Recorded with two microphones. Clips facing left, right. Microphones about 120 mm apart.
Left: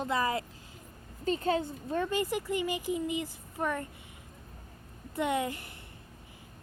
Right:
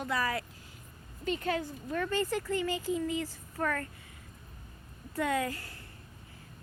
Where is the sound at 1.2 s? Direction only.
35° left (ahead or behind); by 3.8 s 15° left (ahead or behind).